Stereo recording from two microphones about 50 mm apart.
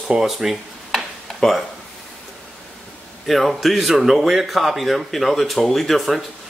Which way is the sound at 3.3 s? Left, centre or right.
Centre.